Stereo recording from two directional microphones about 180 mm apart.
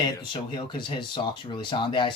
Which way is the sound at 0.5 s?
25° left (ahead or behind).